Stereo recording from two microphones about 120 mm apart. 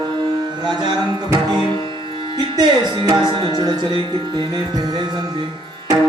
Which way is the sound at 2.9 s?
40° right (ahead or behind).